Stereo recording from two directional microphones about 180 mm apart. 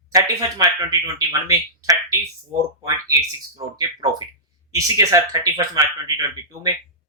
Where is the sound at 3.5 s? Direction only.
20° right (ahead or behind).